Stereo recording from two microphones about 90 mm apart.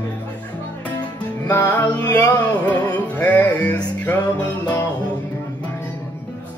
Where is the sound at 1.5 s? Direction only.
20° left (ahead or behind).